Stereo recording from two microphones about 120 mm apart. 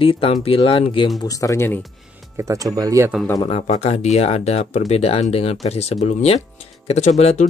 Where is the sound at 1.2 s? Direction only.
25° left (ahead or behind).